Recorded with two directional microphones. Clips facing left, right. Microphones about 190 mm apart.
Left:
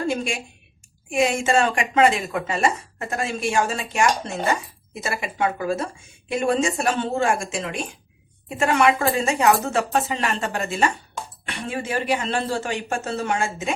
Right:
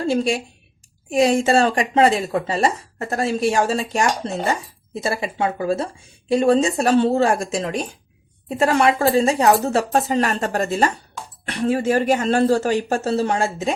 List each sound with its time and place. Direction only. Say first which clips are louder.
1.1 s speech: right 4 dB; 35° right (ahead or behind)